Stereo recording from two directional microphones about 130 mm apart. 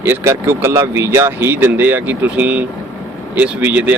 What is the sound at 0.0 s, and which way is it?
Speech, 20° right (ahead or behind).